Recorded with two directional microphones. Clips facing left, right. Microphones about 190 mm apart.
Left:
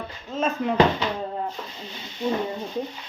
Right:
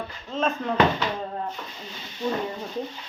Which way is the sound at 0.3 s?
5° left (ahead or behind).